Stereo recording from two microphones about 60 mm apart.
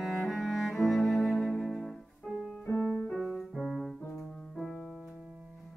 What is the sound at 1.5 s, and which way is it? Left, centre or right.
Music, centre.